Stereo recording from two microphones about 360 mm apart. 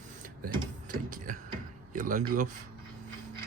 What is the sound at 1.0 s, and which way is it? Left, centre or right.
Speech, right.